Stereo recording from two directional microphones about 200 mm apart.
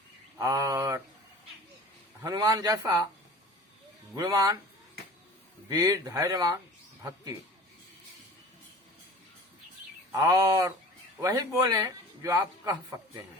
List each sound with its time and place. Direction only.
0.3 s speech: 15° right (ahead or behind)
2.2 s speech: 20° right (ahead or behind)
4.1 s speech: 20° right (ahead or behind)
5.6 s speech: 20° right (ahead or behind)
10.1 s a man's voice: 20° right (ahead or behind)